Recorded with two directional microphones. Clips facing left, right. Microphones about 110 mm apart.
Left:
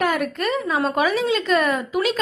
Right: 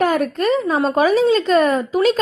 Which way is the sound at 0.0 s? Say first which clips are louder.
Right 5 dB; 40° right (ahead or behind).